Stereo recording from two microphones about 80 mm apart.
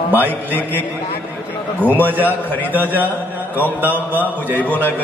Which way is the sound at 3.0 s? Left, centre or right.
Left.